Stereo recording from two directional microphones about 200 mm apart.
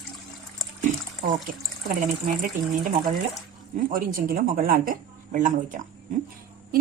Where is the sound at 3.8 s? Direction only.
45° right (ahead or behind).